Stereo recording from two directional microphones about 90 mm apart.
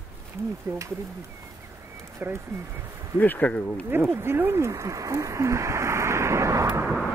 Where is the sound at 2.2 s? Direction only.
25° right (ahead or behind).